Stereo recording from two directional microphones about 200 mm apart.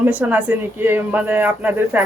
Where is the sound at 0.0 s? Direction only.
10° right (ahead or behind).